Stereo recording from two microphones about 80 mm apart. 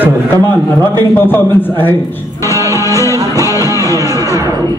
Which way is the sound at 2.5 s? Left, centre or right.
Left.